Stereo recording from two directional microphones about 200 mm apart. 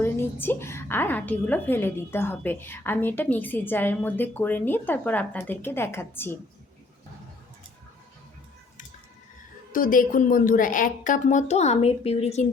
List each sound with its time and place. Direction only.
0.0 s a woman's voice: 10° left (ahead or behind)
9.7 s a woman's voice: 45° left (ahead or behind)